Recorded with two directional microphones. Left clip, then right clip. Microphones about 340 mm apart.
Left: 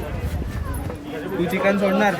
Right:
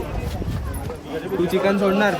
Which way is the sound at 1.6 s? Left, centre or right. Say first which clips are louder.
Left 2 dB; centre.